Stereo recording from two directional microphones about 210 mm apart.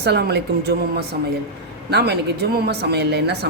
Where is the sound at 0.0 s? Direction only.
50° right (ahead or behind).